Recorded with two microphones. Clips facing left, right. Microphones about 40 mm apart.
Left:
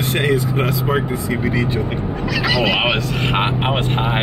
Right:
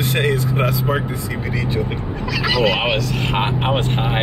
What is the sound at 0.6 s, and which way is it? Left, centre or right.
Speech, centre.